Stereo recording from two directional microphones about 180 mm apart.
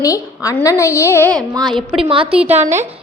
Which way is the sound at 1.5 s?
20° right (ahead or behind).